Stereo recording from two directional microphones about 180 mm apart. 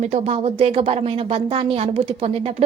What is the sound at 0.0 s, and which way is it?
A woman's voice, 40° right (ahead or behind).